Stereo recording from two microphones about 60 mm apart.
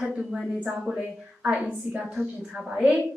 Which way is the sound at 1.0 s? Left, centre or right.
Right.